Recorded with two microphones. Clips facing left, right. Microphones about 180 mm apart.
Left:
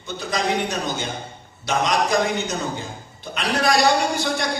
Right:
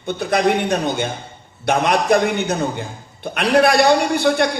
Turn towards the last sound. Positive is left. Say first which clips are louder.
# right 6 dB
turn(degrees=-60)  # may be behind; listen again after turning